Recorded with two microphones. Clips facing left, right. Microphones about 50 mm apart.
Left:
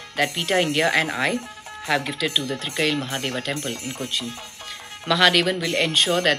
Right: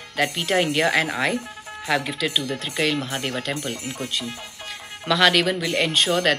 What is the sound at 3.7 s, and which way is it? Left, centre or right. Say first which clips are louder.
Speech: even; centre.